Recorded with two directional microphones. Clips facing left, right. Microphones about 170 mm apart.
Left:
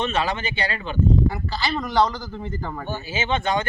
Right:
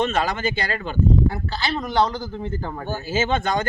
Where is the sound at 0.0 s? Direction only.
45° right (ahead or behind).